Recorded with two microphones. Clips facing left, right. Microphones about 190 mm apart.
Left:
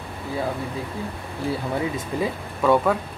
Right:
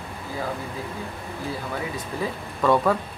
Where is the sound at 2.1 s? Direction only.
15° left (ahead or behind).